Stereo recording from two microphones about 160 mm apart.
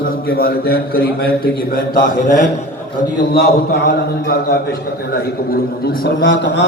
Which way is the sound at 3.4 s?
85° left.